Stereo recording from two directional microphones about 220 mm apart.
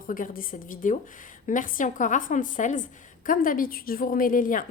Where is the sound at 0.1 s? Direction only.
40° left (ahead or behind).